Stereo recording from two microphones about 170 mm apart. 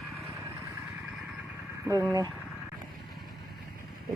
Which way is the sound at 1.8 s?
20° right (ahead or behind).